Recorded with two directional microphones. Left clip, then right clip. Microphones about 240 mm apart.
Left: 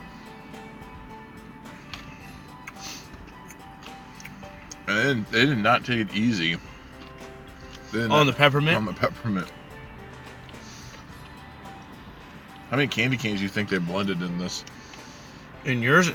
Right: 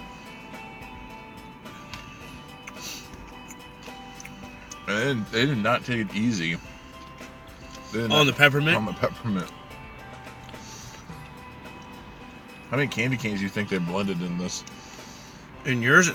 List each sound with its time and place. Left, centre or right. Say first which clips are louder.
4.9 s speech: left 3 dB; centre
8.1 s a man's voice: even; centre
8.7 s speech: even; centre
12.7 s speech: left 2 dB; centre
15.6 s a man's voice: right 1 dB; centre